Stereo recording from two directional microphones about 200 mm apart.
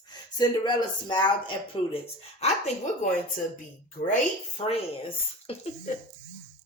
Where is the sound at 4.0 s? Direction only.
45° left (ahead or behind).